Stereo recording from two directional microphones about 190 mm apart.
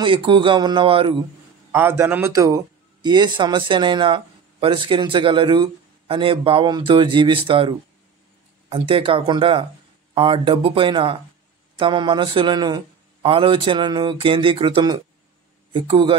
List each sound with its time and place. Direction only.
0.0 s a man's voice: 25° right (ahead or behind)
1.7 s a man's voice: 10° right (ahead or behind); by 16.2 s 30° right (ahead or behind)